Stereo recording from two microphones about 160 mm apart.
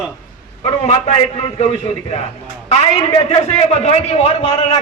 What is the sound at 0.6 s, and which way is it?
Speech, 40° left (ahead or behind).